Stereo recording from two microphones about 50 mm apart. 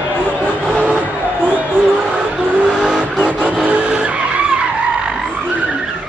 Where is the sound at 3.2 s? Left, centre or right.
Right.